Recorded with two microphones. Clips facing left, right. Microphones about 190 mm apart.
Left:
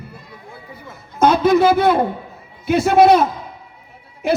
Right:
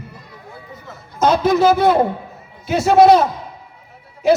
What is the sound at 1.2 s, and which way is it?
Speech, 60° left (ahead or behind).